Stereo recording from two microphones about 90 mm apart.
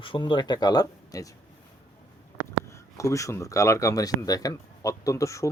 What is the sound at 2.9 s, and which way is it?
Speech, 40° left (ahead or behind).